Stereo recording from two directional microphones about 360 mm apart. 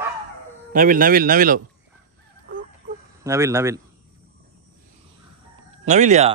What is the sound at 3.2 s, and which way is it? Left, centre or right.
Speech, centre.